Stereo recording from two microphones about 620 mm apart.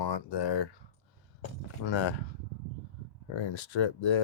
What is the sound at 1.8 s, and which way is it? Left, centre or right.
Speech, left.